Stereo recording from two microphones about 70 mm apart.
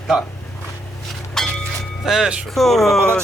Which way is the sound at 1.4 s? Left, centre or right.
Centre.